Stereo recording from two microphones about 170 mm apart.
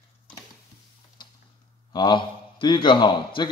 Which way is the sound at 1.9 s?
25° left (ahead or behind).